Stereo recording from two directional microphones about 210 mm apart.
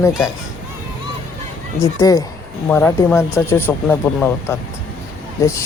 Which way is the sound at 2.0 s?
15° left (ahead or behind).